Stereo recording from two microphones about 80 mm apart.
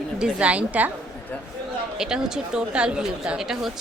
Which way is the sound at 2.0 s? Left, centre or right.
Centre.